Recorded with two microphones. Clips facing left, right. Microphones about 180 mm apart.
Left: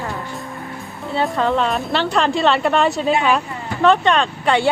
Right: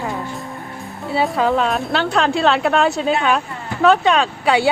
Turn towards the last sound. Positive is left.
turn(degrees=-5)  # may be behind; listen again after turning